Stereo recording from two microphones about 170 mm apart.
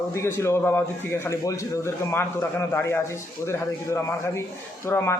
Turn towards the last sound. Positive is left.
turn(degrees=15)  # may be behind; listen again after turning